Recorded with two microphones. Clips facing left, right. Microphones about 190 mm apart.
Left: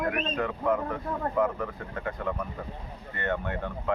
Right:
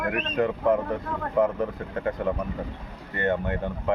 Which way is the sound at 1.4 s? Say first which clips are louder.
Right 4 dB; 20° right (ahead or behind).